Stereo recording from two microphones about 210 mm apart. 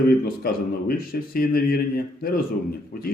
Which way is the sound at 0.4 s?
45° left (ahead or behind).